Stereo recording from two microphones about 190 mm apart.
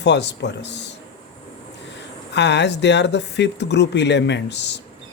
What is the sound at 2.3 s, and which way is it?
Speech, 65° left (ahead or behind).